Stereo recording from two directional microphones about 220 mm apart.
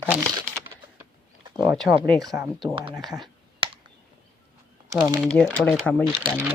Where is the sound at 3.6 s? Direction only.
25° right (ahead or behind).